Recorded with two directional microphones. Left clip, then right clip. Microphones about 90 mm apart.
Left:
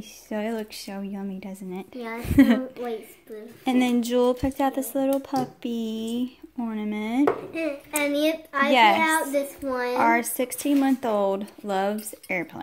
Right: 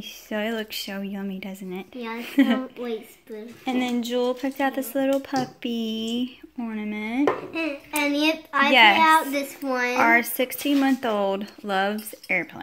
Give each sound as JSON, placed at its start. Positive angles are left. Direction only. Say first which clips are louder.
{"t": 0.3, "sound": "speech", "louder": "right 2 dB", "side_deg": 10}
{"t": 2.3, "sound": "a woman's voice", "louder": "left 2 dB", "side_deg": 60}
{"t": 3.6, "sound": "speech", "louder": "left 3 dB", "side_deg": 70}
{"t": 4.4, "sound": "speech", "louder": "left 1 dB", "side_deg": 45}
{"t": 4.6, "sound": "speech", "louder": "right 2 dB", "side_deg": 20}
{"t": 6.6, "sound": "speech", "louder": "left 1 dB", "side_deg": 45}
{"t": 7.5, "sound": "a child's voice", "louder": "right 1 dB", "side_deg": -50}
{"t": 8.3, "sound": "a child's voice", "louder": "right 2 dB", "side_deg": -85}
{"t": 8.7, "sound": "a woman's voice", "louder": "right 2 dB", "side_deg": 30}
{"t": 9.0, "sound": "a child's voice", "louder": "right 5 dB", "side_deg": -45}
{"t": 9.7, "sound": "a woman's voice", "louder": "right 7 dB", "side_deg": -60}
{"t": 9.9, "sound": "speech", "louder": "right 2 dB", "side_deg": 20}